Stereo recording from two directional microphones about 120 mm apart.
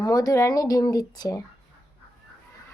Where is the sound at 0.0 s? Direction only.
30° left (ahead or behind).